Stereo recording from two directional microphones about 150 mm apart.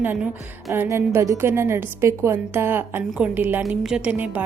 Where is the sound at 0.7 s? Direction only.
15° right (ahead or behind).